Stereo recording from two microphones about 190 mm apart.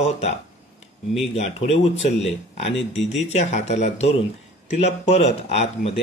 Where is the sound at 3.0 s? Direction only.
Centre (ahead or behind).